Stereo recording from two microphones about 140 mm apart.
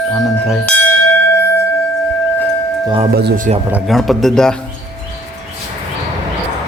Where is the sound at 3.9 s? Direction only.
Centre (ahead or behind).